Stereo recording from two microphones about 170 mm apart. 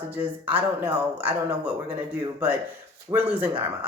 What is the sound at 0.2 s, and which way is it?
Speech, 10° right (ahead or behind).